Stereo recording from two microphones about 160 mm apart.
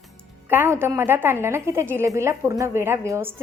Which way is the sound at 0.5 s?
15° right (ahead or behind).